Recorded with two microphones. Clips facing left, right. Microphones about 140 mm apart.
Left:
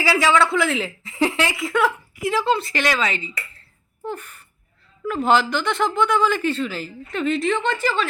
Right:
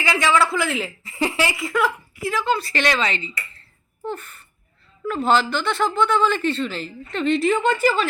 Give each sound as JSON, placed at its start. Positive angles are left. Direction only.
{"t": 0.0, "sound": "speech", "side_deg": 5}
{"t": 2.3, "sound": "speech", "side_deg": 30}
{"t": 2.7, "sound": "speech", "side_deg": 10}